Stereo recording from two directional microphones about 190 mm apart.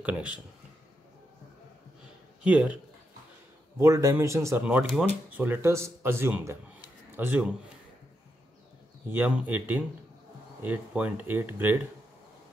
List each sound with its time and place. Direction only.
0.0 s speech: 5° right (ahead or behind)
2.4 s speech: 5° right (ahead or behind)
3.8 s speech: 15° right (ahead or behind)
9.1 s speech: 10° right (ahead or behind)